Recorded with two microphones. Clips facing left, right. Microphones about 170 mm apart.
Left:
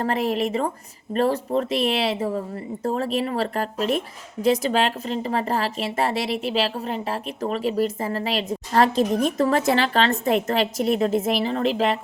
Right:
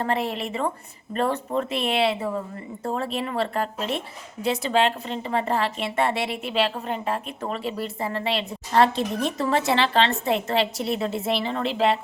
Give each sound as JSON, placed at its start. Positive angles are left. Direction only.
{"t": 0.0, "sound": "a woman's voice", "side_deg": 40}